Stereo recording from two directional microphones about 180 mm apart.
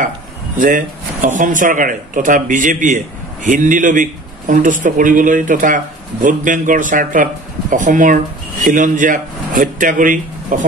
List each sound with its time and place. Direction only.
0.6 s speech: 45° right (ahead or behind)